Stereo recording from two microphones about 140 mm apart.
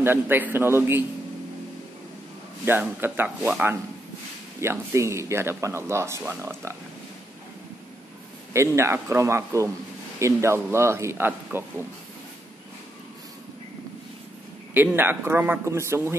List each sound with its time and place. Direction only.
0.0 s a man's voice: 15° right (ahead or behind)
2.6 s a man's voice: 15° right (ahead or behind)
8.5 s speech: 20° right (ahead or behind)
14.7 s a man's voice: 15° right (ahead or behind)